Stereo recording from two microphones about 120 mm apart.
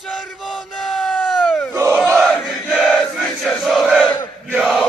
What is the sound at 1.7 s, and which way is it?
Battle cry, 25° right (ahead or behind).